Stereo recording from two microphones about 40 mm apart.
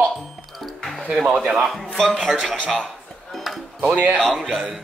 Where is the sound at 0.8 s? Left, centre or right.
Centre.